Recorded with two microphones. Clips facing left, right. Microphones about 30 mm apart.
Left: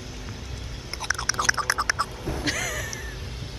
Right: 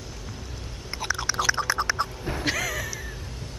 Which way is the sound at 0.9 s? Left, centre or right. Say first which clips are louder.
Even; centre.